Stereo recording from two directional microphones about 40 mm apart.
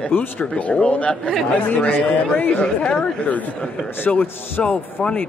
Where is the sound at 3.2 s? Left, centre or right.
Left.